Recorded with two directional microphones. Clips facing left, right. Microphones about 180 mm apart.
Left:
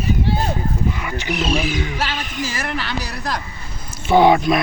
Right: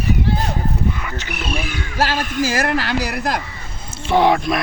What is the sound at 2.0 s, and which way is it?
Speech, 45° right (ahead or behind).